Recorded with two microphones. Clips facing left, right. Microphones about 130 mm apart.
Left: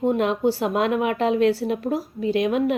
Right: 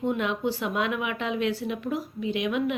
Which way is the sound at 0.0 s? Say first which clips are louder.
Left 6 dB; 40° left (ahead or behind).